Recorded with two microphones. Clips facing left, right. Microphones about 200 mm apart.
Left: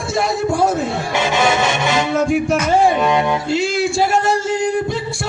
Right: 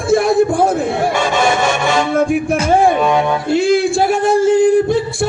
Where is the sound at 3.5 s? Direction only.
55° right (ahead or behind).